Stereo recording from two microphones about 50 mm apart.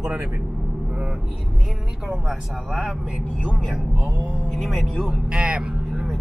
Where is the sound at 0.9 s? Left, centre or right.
Centre.